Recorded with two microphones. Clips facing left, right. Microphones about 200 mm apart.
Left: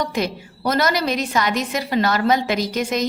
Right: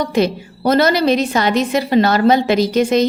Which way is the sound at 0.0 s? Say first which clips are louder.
Right 7 dB; 30° right (ahead or behind).